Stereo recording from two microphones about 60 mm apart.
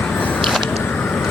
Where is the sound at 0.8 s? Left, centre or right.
Left.